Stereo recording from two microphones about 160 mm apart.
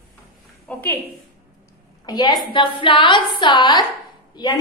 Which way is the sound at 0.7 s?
10° left (ahead or behind).